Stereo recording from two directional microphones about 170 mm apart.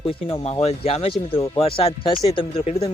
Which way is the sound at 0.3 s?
35° left (ahead or behind).